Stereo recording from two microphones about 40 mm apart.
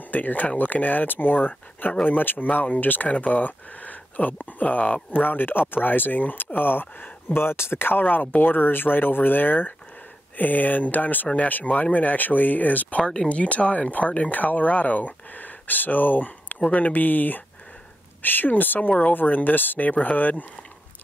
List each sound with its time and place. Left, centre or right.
0.1 s speech: left
5.1 s speech: left
7.3 s speech: left
19.9 s speech: left